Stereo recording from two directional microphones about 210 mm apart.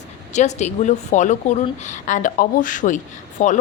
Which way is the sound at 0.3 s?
35° left (ahead or behind).